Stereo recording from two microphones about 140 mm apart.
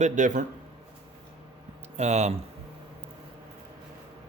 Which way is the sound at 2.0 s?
55° right (ahead or behind).